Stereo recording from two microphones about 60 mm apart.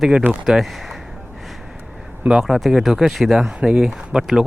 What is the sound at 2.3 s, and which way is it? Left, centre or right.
Speech, centre.